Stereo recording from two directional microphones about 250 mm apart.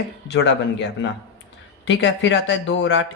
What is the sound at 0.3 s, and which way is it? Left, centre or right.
Speech, left.